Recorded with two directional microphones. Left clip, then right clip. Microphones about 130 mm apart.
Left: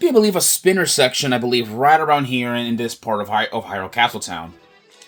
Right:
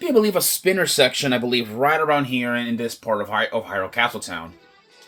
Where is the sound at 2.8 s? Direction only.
90° left.